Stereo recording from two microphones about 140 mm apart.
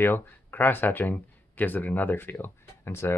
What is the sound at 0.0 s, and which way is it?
Speech, 15° left (ahead or behind).